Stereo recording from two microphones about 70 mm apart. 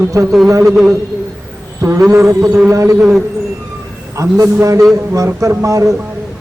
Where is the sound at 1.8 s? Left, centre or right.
Right.